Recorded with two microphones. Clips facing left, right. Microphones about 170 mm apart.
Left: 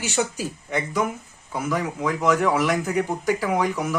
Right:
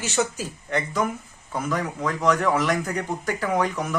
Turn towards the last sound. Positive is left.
turn(degrees=10)  # may be behind; listen again after turning